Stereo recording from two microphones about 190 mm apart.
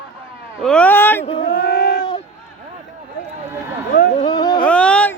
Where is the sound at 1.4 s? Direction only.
60° left (ahead or behind).